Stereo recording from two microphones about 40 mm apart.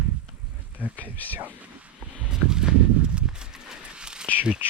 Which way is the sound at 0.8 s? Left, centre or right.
Right.